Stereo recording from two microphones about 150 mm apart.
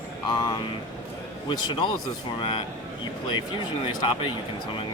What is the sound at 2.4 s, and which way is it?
Speech, 35° left (ahead or behind).